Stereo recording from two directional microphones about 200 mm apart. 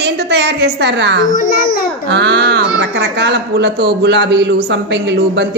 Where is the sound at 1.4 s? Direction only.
45° left (ahead or behind).